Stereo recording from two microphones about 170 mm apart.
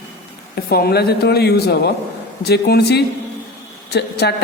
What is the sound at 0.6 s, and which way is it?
A man's voice, 65° left (ahead or behind).